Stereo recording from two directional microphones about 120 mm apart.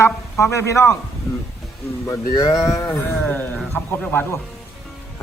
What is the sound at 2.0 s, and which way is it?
A man's voice, 30° left (ahead or behind).